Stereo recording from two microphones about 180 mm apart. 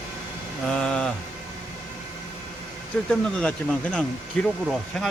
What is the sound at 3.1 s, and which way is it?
Speech, 5° left (ahead or behind).